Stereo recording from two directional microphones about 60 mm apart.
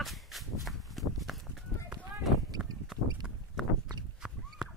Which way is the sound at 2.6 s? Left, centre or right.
Right.